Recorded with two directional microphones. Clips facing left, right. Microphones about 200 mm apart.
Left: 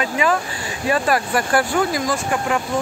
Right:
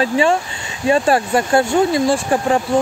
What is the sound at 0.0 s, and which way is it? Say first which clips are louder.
Speech: right 4 dB; 30° right (ahead or behind).